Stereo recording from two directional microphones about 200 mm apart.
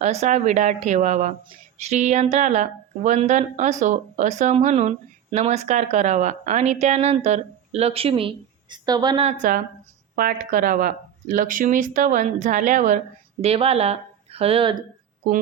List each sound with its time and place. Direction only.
0.0 s speech: 35° right (ahead or behind)
9.2 s speech: 40° right (ahead or behind); by 14.8 s 25° right (ahead or behind)